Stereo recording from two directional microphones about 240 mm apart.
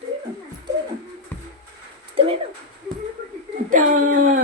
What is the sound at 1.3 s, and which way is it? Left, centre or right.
Music, centre.